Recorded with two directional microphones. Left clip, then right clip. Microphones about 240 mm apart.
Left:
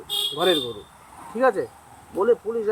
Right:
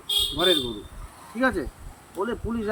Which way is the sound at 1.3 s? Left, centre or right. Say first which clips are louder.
Left 4 dB; right.